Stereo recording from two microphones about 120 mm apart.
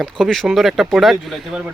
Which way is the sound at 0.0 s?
5° left (ahead or behind).